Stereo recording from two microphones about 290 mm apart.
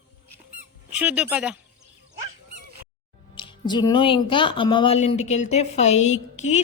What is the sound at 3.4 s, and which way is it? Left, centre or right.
Speech, centre.